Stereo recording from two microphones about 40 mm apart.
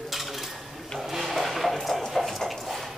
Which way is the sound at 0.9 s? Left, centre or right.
Centre.